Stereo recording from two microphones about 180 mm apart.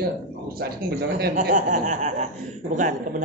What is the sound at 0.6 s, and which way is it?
Speech, 60° right (ahead or behind).